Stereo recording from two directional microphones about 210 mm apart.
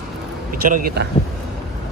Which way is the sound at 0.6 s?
40° right (ahead or behind).